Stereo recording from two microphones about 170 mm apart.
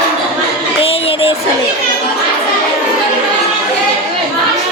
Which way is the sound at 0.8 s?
35° left (ahead or behind).